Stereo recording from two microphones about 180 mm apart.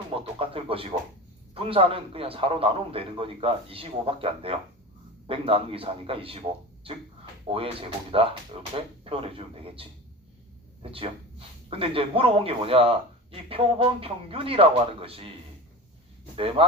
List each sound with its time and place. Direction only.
0.1 s music: 30° right (ahead or behind)
1.5 s speech: 30° right (ahead or behind)
10.9 s speech: 30° right (ahead or behind)
16.3 s speech: 30° right (ahead or behind)